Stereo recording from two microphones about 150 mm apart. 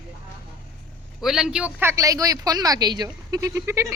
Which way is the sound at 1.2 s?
5° right (ahead or behind).